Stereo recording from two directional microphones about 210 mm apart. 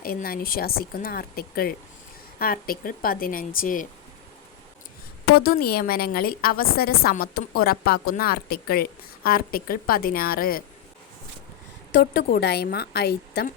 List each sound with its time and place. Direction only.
0.0 s a woman's voice: 45° left (ahead or behind)
5.3 s a woman's voice: 45° left (ahead or behind)
11.9 s a woman's voice: 50° left (ahead or behind)